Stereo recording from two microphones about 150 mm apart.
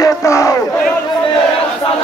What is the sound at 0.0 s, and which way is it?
Battle cry, 20° left (ahead or behind).